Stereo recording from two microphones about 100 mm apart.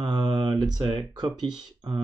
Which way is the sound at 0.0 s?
50° right (ahead or behind).